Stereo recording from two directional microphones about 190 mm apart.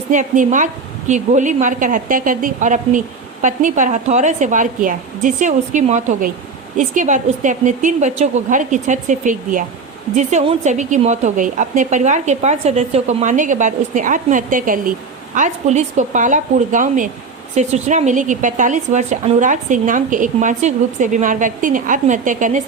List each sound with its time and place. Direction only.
0.1 s speech: 40° right (ahead or behind)